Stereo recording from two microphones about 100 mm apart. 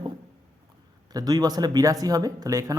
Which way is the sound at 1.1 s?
40° right (ahead or behind).